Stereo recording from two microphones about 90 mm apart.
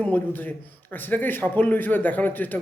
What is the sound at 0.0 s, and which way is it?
A man's voice, 20° left (ahead or behind).